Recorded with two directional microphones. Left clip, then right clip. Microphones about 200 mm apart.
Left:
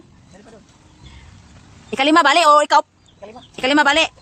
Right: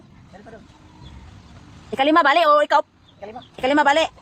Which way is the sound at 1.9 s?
30° left (ahead or behind).